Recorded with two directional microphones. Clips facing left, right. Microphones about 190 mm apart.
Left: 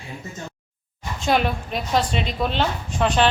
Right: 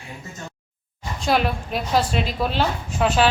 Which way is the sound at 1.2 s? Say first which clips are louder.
Even; centre (ahead or behind).